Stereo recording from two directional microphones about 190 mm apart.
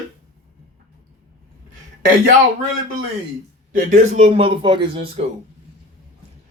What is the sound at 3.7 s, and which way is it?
Speech, 40° right (ahead or behind).